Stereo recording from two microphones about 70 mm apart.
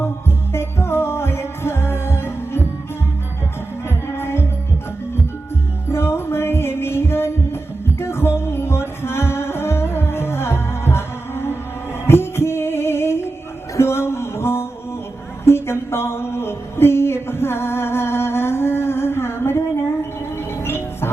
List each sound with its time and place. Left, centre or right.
0.0 s music: left
3.8 s music: left
5.9 s music: left
15.4 s a sound: left
20.6 s music: left